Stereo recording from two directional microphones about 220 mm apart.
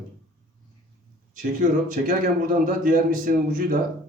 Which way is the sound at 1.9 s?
35° right (ahead or behind).